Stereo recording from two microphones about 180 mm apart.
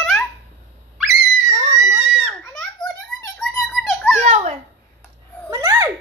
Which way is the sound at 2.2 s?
5° right (ahead or behind).